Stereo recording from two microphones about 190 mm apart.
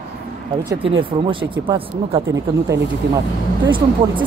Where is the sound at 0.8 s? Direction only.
25° right (ahead or behind).